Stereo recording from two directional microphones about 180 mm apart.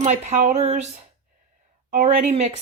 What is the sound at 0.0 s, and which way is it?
Speech, 40° right (ahead or behind).